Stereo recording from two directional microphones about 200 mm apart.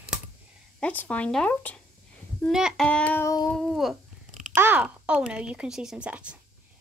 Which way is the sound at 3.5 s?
Centre (ahead or behind).